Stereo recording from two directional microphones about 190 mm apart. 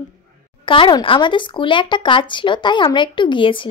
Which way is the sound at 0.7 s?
25° left (ahead or behind).